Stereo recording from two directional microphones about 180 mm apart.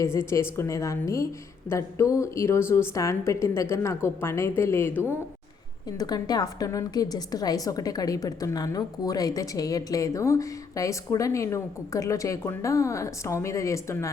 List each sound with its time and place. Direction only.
0.0 s a woman's voice: 15° left (ahead or behind)